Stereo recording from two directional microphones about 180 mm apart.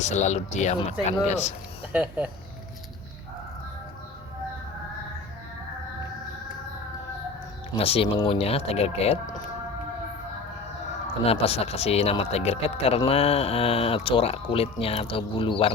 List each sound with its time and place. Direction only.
0.0 s speech: 40° left (ahead or behind)
1.9 s speech: 10° right (ahead or behind)
7.7 s speech: 30° left (ahead or behind)
11.3 s speech: 35° left (ahead or behind)